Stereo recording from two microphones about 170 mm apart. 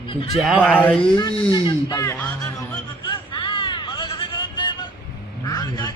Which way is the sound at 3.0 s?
30° left (ahead or behind).